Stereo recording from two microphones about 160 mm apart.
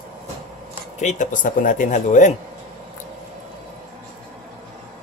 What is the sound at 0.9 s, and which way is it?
A man's voice, 50° left (ahead or behind).